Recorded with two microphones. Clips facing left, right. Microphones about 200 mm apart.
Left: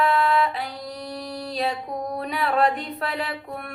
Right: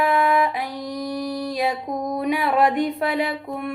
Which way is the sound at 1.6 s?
20° right (ahead or behind).